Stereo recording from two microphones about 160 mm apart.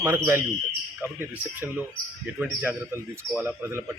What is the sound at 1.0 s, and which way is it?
A man's voice, 10° right (ahead or behind).